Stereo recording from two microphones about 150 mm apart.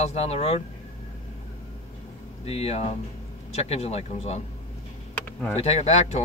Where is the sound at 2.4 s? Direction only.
45° left (ahead or behind).